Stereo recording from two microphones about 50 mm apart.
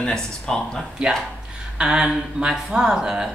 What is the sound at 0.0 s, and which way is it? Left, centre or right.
Speech, centre.